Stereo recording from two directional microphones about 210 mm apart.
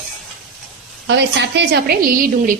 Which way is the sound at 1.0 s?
55° right (ahead or behind).